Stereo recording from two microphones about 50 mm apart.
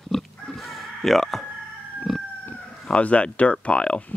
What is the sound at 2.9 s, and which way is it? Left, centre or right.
Speech, left.